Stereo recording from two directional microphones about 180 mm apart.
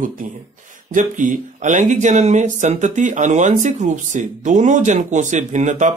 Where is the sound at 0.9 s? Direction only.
45° right (ahead or behind).